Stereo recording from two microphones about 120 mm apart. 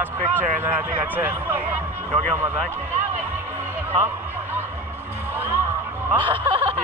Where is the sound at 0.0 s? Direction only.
15° right (ahead or behind).